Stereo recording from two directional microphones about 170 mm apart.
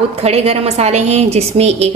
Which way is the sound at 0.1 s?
40° right (ahead or behind).